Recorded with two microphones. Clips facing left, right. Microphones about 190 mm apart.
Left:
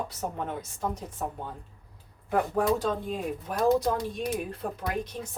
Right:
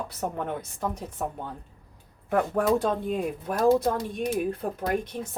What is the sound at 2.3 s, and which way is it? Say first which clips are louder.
A woman's voice: right 2 dB; 55° right (ahead or behind).